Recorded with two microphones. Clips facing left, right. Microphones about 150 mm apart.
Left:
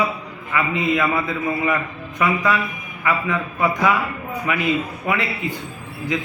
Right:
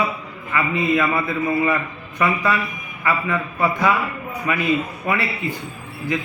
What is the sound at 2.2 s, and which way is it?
A man's voice, 15° left (ahead or behind).